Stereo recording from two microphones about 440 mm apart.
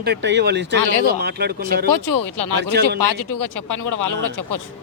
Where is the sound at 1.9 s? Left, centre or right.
Left.